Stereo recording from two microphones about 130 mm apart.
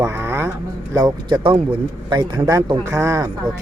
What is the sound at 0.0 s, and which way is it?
Vehicle, 20° right (ahead or behind).